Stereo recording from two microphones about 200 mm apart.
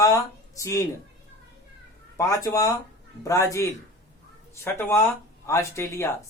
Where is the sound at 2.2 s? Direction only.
15° left (ahead or behind).